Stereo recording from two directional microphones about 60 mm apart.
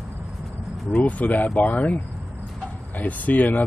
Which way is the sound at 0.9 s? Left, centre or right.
Left.